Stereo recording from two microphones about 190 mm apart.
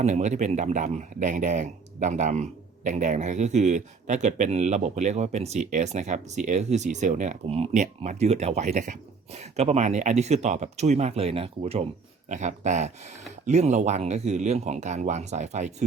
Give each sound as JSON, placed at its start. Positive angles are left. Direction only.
{"t": 0.0, "sound": "speech", "side_deg": -35}